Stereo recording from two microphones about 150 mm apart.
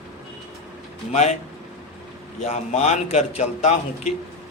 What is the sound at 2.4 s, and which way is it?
A man's voice, 45° left (ahead or behind).